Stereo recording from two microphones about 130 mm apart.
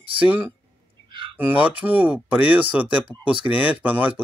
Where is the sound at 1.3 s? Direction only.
15° right (ahead or behind).